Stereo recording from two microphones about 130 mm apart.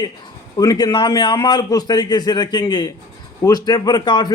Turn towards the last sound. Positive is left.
turn(degrees=35)  # may be behind; listen again after turning